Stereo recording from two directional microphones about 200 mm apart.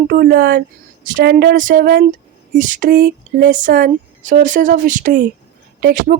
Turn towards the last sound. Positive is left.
turn(degrees=-45)  # may be behind; listen again after turning